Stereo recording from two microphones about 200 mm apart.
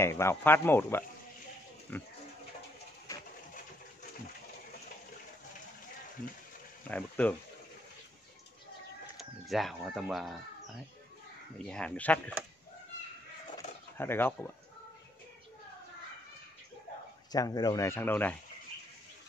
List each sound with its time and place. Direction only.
0.0 s speech: 15° left (ahead or behind)
3.1 s pigeon: 15° left (ahead or behind)
6.9 s speech: 5° left (ahead or behind)
9.1 s speech: centre (ahead or behind)
11.5 s speech: 5° left (ahead or behind)
13.9 s speech: 10° left (ahead or behind)
17.3 s speech: 20° left (ahead or behind)